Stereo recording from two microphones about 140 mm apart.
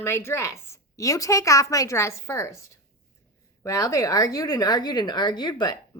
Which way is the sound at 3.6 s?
25° left (ahead or behind).